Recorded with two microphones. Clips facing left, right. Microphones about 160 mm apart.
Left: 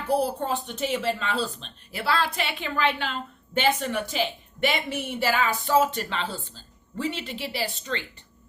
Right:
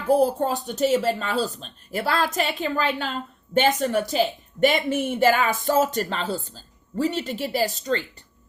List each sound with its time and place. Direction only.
0.1 s a woman's voice: 45° right (ahead or behind)